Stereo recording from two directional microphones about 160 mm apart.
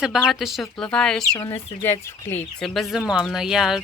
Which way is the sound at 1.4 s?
15° left (ahead or behind).